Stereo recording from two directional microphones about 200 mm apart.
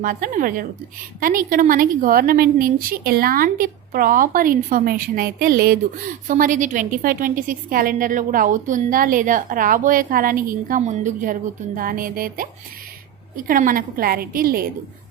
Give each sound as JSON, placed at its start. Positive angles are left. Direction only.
{"t": 0.0, "sound": "a woman's voice", "side_deg": -45}